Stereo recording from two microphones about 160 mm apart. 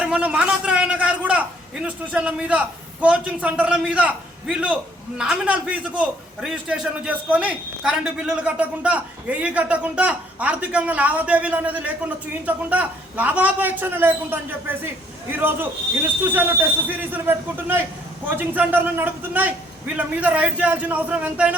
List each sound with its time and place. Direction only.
0.0 s a man's voice: 5° right (ahead or behind)